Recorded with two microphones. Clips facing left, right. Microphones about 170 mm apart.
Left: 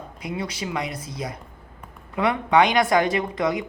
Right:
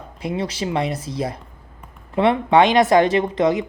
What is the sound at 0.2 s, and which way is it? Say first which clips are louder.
Speech: right 6 dB; 30° right (ahead or behind).